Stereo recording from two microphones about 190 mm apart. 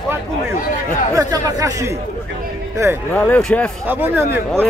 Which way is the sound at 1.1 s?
15° right (ahead or behind).